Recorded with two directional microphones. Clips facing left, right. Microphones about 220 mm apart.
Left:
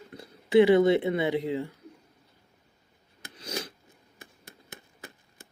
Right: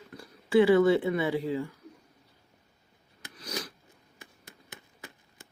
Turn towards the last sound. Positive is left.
turn(degrees=25)  # may be behind; listen again after turning